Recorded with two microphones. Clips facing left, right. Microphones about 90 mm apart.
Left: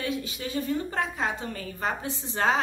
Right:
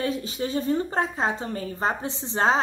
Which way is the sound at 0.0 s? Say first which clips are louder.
Right 4 dB; 35° right (ahead or behind).